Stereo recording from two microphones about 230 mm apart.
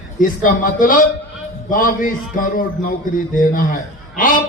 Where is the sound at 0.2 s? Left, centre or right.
Left.